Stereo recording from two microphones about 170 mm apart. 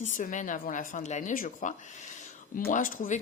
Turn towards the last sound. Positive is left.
turn(degrees=45)  # may be behind; listen again after turning